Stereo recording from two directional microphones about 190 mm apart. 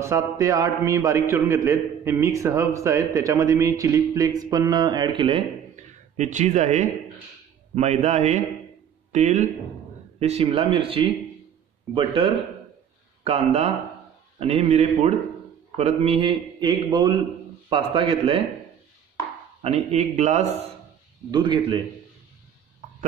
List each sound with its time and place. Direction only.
0.0 s a man's voice: 15° right (ahead or behind)
6.1 s a man's voice: 40° right (ahead or behind)
19.6 s a man's voice: 35° right (ahead or behind)
21.3 s a man's voice: 25° right (ahead or behind)